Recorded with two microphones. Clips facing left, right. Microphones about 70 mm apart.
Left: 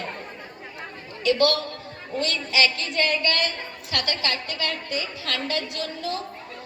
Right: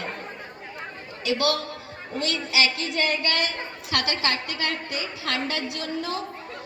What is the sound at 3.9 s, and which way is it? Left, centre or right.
A woman's voice, right.